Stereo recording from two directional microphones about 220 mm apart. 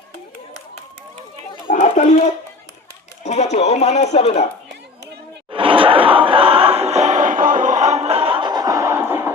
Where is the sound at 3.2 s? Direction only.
30° left (ahead or behind).